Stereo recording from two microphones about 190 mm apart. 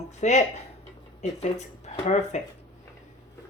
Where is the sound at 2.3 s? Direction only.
40° left (ahead or behind).